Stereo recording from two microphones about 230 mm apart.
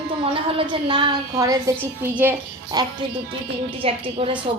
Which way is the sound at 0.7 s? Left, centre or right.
Right.